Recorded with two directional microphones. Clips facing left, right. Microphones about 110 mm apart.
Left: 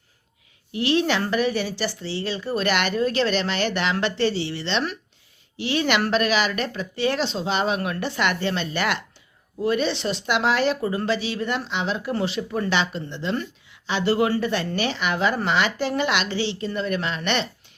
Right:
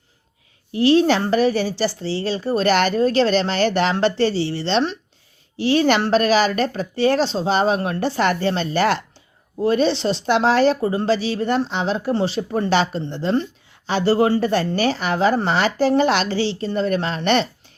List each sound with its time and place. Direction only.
0.7 s speech: 35° right (ahead or behind)